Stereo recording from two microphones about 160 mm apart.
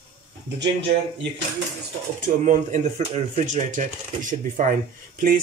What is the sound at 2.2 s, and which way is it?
Speech, 50° right (ahead or behind).